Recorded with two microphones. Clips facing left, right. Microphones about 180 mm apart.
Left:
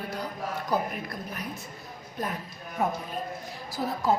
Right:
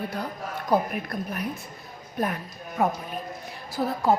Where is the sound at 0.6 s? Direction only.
55° right (ahead or behind).